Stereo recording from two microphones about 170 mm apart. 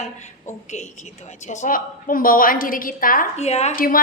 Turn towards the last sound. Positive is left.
turn(degrees=55)  # may be behind; listen again after turning